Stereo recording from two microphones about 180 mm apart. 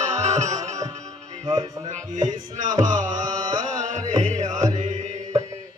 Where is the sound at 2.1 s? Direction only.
40° right (ahead or behind).